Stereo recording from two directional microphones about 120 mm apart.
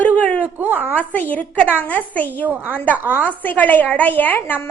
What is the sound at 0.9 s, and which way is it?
A woman's voice, 15° left (ahead or behind).